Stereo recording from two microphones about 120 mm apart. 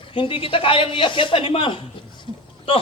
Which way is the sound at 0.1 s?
45° left (ahead or behind).